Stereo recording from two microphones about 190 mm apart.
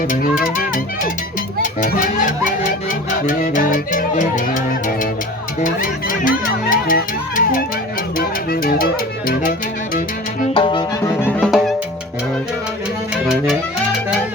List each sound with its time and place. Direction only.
0.1 s speech: 45° left (ahead or behind)
1.8 s speech: 45° left (ahead or behind)
10.5 s music: 25° left (ahead or behind)
11.0 s music: 15° left (ahead or behind)
11.3 s music: 5° left (ahead or behind)